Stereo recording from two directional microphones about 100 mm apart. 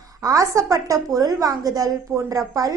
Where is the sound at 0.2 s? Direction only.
35° right (ahead or behind).